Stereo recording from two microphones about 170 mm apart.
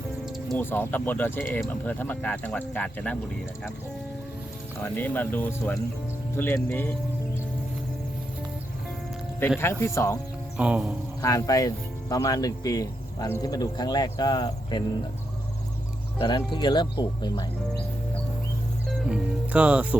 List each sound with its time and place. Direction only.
0.3 s music: centre (ahead or behind)
0.6 s speech: 10° left (ahead or behind)
4.8 s speech: 10° left (ahead or behind)
9.6 s speech: 15° left (ahead or behind)
10.6 s music: 5° right (ahead or behind)
11.2 s speech: 20° left (ahead or behind)
16.1 s speech: 25° left (ahead or behind)
18.9 s speech: 5° right (ahead or behind)